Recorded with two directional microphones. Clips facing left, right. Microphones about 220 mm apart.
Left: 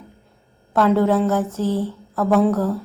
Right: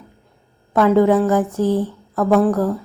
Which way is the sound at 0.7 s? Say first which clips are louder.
Right 3 dB; 10° right (ahead or behind).